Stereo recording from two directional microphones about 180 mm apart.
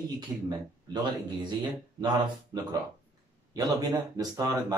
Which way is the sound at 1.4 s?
25° right (ahead or behind).